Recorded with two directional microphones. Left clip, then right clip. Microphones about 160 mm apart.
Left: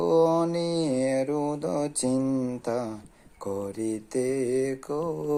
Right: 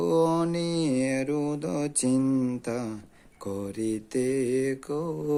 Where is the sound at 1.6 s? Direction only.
40° right (ahead or behind).